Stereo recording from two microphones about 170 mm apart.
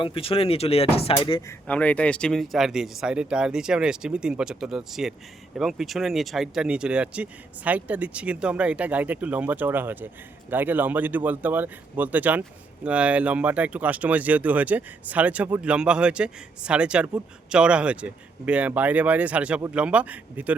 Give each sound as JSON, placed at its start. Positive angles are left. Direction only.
{"t": 0.0, "sound": "speech", "side_deg": 30}
{"t": 1.5, "sound": "speech", "side_deg": 10}